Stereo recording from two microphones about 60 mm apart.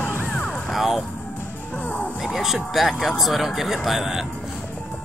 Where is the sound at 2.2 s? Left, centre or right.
Centre.